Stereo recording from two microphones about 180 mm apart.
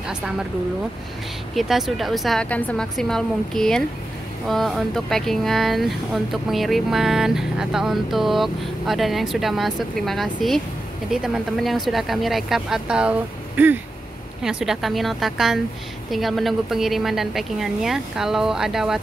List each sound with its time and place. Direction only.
0.1 s speech: 5° right (ahead or behind)
1.5 s speech: centre (ahead or behind)